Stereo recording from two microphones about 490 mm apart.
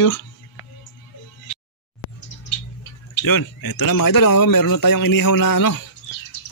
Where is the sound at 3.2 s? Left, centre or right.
Left.